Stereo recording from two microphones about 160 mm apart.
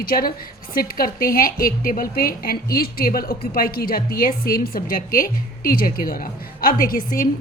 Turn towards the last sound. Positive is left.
turn(degrees=60)  # may be behind; listen again after turning